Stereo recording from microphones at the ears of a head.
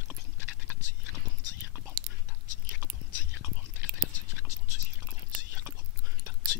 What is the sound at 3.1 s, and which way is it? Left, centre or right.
Whispering, left.